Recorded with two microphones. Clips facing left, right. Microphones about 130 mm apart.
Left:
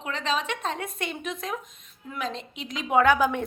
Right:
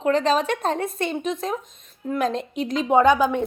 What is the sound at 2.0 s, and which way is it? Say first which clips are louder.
Speech: right 9 dB; 40° right (ahead or behind).